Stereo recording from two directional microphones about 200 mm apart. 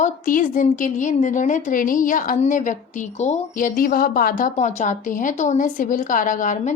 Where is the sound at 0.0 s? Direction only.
40° left (ahead or behind).